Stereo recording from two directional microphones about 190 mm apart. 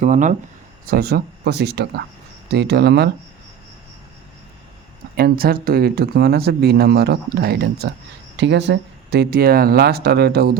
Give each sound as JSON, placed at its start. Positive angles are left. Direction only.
{"t": 0.0, "sound": "speech", "side_deg": -40}
{"t": 0.9, "sound": "speech", "side_deg": -55}
{"t": 5.1, "sound": "speech", "side_deg": -50}